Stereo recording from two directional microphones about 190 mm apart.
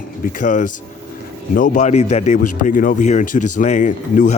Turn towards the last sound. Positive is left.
turn(degrees=40)  # may be behind; listen again after turning